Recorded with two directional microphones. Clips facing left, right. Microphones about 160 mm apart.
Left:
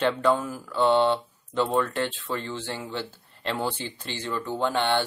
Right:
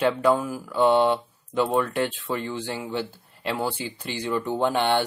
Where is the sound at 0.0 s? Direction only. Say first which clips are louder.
Right 2 dB; 10° right (ahead or behind).